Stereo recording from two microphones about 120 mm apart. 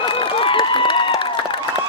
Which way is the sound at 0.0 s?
45° left (ahead or behind).